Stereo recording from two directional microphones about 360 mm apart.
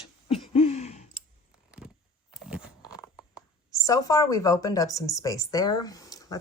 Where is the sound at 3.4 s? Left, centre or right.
Centre.